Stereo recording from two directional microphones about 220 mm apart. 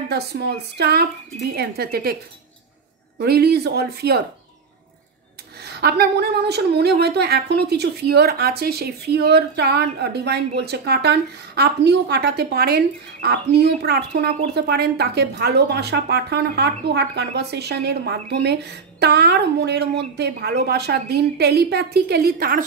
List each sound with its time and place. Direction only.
0.1 s a woman's voice: 50° right (ahead or behind)
3.2 s a woman's voice: 45° right (ahead or behind)
5.6 s a woman's voice: 45° right (ahead or behind)